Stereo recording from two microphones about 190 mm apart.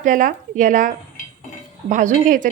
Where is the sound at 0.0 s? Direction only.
45° right (ahead or behind).